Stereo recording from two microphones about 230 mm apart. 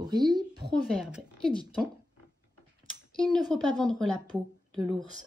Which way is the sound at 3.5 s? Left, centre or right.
Centre.